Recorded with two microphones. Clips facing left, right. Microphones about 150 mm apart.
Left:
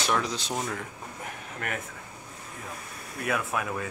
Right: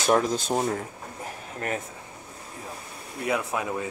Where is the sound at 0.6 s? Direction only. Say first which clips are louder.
Right 6 dB; 35° right (ahead or behind).